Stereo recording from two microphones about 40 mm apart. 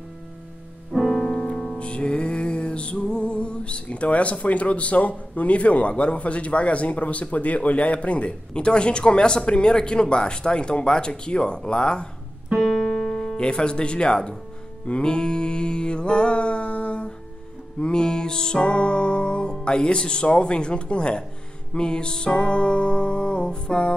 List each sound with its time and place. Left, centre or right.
0.9 s music: centre
1.8 s music: left
12.5 s keyboard: centre
12.8 s music: centre
18.6 s speech: left
21.7 s music: left